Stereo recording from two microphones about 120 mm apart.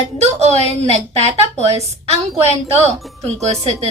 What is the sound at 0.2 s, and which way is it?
A woman's voice, 65° right (ahead or behind).